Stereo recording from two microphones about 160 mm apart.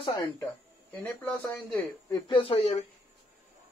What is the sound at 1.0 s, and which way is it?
Speech, 10° left (ahead or behind).